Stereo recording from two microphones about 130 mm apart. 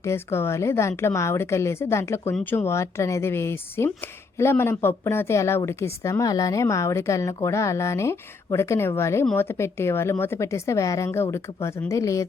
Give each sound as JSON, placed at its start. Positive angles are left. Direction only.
{"t": 0.0, "sound": "speech", "side_deg": 20}